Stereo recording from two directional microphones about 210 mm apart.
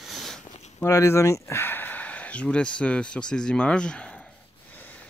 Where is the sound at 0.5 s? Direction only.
30° left (ahead or behind).